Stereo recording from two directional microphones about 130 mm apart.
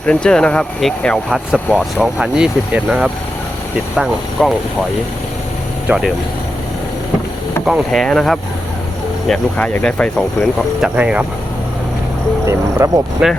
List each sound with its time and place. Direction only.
0.0 s speech: 5° left (ahead or behind)
5.9 s speech: 10° right (ahead or behind)
7.6 s speech: centre (ahead or behind)
10.8 s speech: 10° right (ahead or behind)
12.5 s speech: 20° right (ahead or behind)
13.2 s speech: 5° right (ahead or behind)